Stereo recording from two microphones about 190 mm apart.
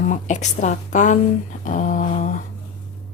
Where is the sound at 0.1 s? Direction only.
40° left (ahead or behind).